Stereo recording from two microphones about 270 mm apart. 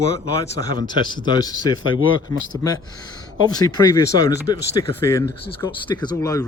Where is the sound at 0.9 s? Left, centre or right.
Centre.